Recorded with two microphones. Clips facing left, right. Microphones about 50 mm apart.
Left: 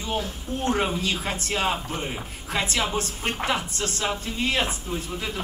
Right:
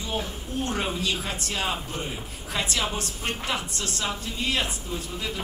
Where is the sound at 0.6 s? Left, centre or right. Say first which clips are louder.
Left 4 dB; left.